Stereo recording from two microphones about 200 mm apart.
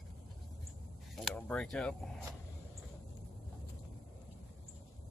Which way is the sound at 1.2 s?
5° left (ahead or behind).